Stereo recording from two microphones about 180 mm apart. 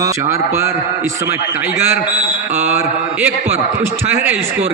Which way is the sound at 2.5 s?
10° right (ahead or behind).